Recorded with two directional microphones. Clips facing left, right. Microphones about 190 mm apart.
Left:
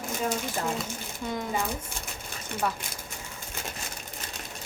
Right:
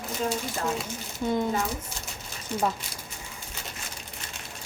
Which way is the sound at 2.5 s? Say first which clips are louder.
Right 3 dB; 60° left (ahead or behind).